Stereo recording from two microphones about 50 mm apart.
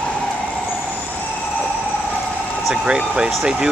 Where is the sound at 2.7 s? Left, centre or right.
Centre.